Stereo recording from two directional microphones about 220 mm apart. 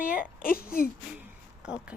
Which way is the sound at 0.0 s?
40° left (ahead or behind).